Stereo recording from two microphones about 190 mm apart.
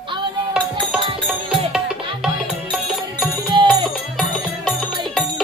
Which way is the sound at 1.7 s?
5° right (ahead or behind).